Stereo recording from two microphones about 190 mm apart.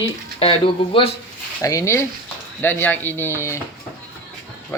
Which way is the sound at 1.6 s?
15° left (ahead or behind).